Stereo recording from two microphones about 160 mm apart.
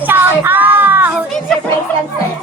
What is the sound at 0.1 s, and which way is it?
Child singing, 15° right (ahead or behind).